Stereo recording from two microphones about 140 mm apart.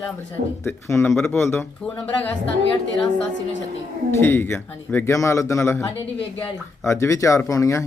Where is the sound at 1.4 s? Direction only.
15° left (ahead or behind).